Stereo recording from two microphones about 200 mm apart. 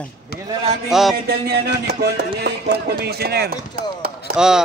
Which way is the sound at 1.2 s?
50° right (ahead or behind).